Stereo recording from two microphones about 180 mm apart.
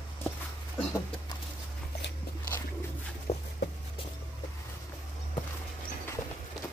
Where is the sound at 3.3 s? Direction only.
35° left (ahead or behind).